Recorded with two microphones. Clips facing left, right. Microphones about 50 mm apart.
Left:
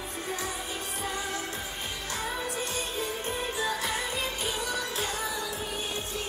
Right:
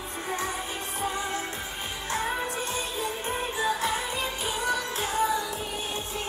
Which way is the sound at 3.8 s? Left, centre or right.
Centre.